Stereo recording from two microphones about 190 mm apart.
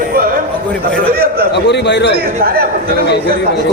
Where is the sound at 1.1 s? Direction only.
55° right (ahead or behind).